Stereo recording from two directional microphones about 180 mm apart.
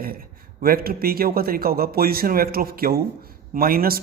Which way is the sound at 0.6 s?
55° right (ahead or behind).